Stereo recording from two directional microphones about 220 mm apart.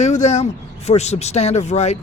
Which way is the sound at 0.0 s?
30° left (ahead or behind).